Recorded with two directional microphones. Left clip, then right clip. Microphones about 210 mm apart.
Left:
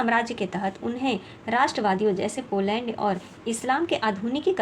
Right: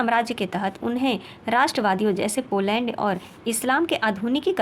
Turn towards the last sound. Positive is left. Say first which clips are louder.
# right 2 dB
turn(degrees=-30)  # may be behind; listen again after turning